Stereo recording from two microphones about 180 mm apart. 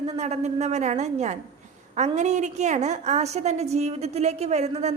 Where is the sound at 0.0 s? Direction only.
35° right (ahead or behind).